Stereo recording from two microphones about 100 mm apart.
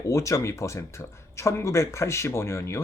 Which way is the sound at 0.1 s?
30° left (ahead or behind).